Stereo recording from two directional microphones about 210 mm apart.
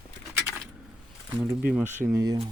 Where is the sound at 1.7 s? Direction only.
5° right (ahead or behind).